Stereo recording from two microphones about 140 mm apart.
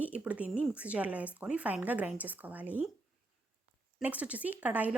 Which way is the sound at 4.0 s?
10° right (ahead or behind).